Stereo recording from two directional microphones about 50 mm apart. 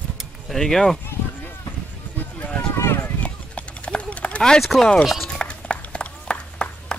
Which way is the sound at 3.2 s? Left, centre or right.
Left.